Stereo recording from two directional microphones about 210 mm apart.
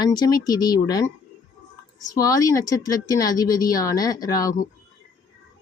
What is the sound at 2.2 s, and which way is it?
Speech, 15° left (ahead or behind).